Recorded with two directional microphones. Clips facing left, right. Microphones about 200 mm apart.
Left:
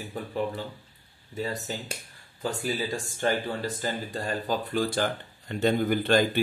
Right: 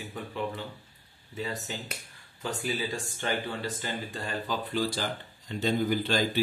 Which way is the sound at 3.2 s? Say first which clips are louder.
Left 5 dB; 40° left (ahead or behind).